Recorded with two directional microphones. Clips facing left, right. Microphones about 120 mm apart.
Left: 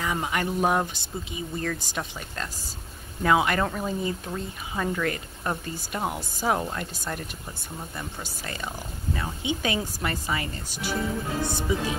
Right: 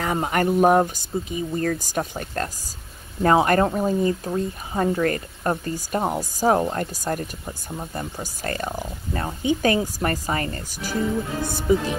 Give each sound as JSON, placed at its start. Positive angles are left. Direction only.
{"t": 0.0, "sound": "speech", "side_deg": -50}